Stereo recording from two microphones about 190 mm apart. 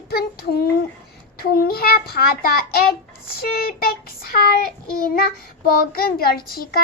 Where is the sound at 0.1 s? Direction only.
55° left (ahead or behind).